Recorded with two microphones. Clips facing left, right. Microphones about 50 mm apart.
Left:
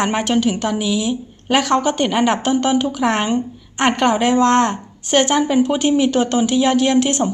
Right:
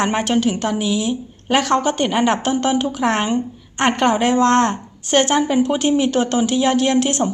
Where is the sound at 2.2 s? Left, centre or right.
Centre.